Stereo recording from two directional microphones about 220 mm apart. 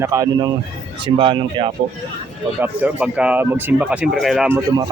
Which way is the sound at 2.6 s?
5° right (ahead or behind).